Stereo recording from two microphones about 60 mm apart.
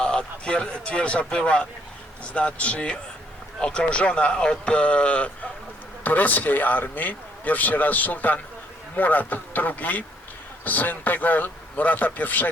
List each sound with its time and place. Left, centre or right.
0.0 s a man's voice: centre